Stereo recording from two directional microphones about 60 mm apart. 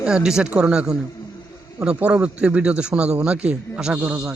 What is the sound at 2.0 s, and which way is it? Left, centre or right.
A man's voice, centre.